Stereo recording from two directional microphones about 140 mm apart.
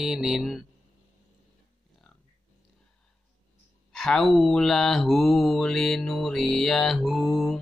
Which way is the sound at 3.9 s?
Centre (ahead or behind).